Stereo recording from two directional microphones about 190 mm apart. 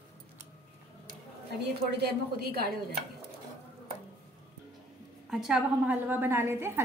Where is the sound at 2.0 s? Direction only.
55° right (ahead or behind).